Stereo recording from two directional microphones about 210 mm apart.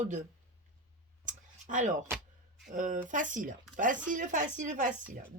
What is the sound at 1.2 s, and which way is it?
Clicking, 35° right (ahead or behind).